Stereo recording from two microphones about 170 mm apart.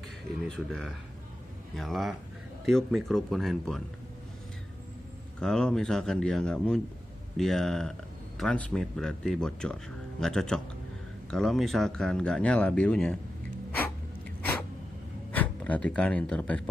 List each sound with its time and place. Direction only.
0.5 s speech: centre (ahead or behind)
5.4 s speech: 5° left (ahead or behind)
15.3 s speech: 10° left (ahead or behind)